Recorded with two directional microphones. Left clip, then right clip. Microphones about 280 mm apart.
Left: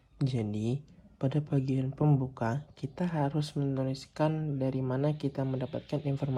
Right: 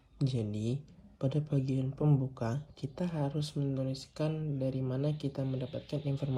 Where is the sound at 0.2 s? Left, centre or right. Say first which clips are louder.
Left 2 dB; left.